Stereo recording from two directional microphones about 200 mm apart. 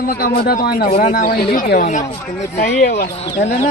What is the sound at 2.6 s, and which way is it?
Speech, 50° left (ahead or behind).